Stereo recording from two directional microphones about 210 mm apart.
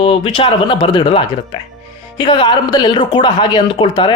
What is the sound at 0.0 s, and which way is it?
Speech, 25° left (ahead or behind).